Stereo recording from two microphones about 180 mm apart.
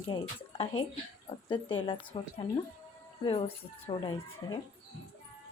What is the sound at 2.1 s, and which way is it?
Speech, 30° left (ahead or behind).